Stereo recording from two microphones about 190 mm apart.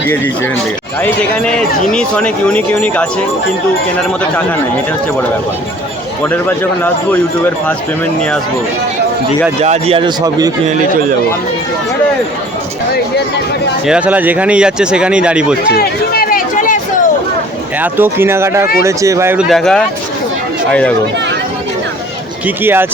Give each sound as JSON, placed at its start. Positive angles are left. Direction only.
{"t": 1.0, "sound": "speech", "side_deg": 5}
{"t": 6.2, "sound": "speech", "side_deg": 10}
{"t": 9.6, "sound": "speech", "side_deg": -35}
{"t": 13.8, "sound": "speech", "side_deg": -5}
{"t": 15.7, "sound": "run", "side_deg": 55}
{"t": 17.7, "sound": "speech", "side_deg": -10}
{"t": 19.5, "sound": "speech", "side_deg": 0}
{"t": 22.4, "sound": "speech", "side_deg": -10}